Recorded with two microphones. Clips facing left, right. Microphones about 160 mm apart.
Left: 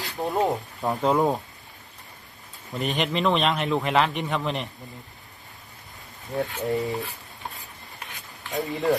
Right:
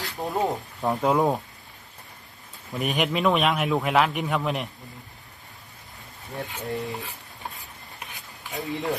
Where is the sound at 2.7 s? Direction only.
5° right (ahead or behind).